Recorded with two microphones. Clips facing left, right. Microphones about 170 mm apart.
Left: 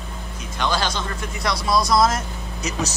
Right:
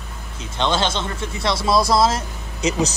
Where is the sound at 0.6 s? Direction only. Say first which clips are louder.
Right 3 dB; 25° right (ahead or behind).